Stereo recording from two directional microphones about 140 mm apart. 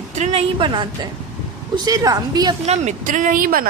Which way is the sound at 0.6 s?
35° right (ahead or behind).